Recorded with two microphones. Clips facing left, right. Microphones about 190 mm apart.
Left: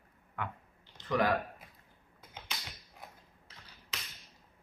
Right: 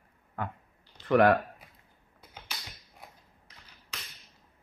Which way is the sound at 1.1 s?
60° right (ahead or behind).